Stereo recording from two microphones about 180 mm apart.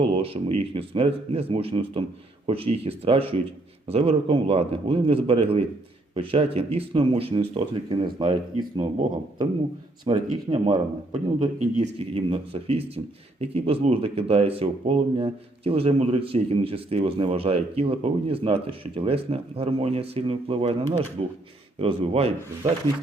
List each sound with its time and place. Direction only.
0.0 s speech: 30° right (ahead or behind)